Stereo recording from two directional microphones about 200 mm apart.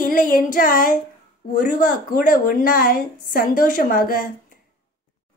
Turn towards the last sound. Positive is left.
turn(degrees=45)  # may be behind; listen again after turning